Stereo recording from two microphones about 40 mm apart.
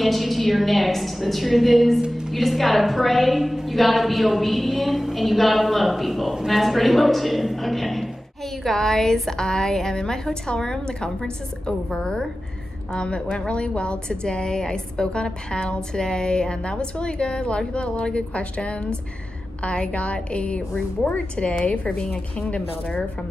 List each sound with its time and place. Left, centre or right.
0.0 s a woman's voice: centre
2.0 s a woman's voice: centre
2.3 s a woman's voice: centre; by 23.0 s left